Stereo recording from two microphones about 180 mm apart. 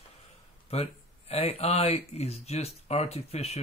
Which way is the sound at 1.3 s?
35° left (ahead or behind).